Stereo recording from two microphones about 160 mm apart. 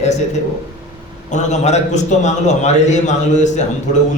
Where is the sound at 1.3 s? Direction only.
45° left (ahead or behind).